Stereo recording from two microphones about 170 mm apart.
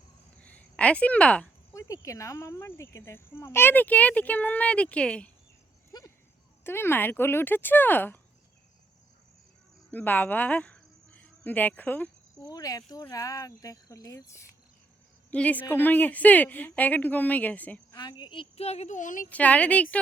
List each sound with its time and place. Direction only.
0.3 s a sound: 10° left (ahead or behind)
1.7 s speech: 20° left (ahead or behind)
5.9 s speech: 25° left (ahead or behind)
9.9 s speech: 10° left (ahead or behind)
12.4 s speech: 20° left (ahead or behind)
17.9 s a woman's voice: 25° left (ahead or behind); by 19.3 s 50° left (ahead or behind)
19.3 s speech: 10° left (ahead or behind)